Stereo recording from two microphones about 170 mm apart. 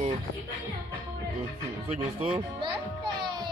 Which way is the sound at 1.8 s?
35° right (ahead or behind).